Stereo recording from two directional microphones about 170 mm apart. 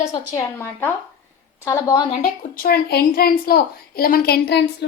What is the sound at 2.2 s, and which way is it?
A woman's voice, 65° left (ahead or behind).